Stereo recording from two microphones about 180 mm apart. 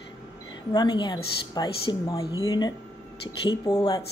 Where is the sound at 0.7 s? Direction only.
25° left (ahead or behind).